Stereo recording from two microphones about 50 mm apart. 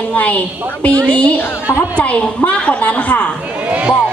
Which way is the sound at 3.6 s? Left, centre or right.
Right.